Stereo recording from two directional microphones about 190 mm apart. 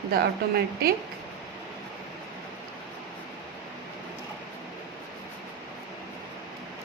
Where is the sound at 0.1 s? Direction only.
55° right (ahead or behind).